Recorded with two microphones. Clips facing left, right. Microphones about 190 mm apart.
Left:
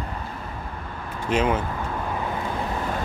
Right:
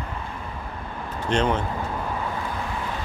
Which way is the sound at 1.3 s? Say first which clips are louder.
Left 1 dB; 5° left (ahead or behind).